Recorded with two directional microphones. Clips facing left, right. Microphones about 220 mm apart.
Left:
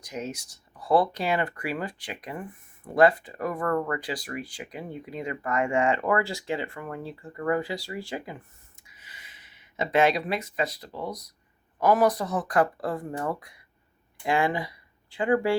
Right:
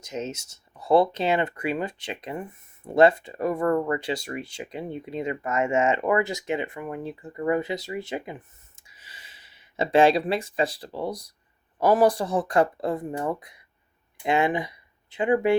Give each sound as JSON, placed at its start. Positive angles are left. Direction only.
{"t": 0.0, "sound": "speech", "side_deg": -25}